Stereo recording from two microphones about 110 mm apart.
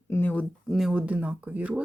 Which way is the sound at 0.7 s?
5° right (ahead or behind).